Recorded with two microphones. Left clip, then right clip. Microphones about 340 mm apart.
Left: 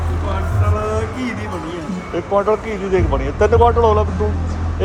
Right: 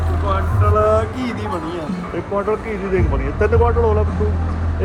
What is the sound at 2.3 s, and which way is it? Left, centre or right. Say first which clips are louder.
Speech: left 4 dB; centre.